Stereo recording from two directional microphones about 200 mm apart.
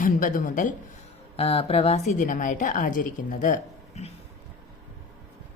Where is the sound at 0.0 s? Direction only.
40° left (ahead or behind).